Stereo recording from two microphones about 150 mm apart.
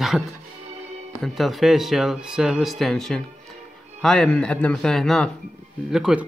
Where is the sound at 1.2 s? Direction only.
Centre (ahead or behind).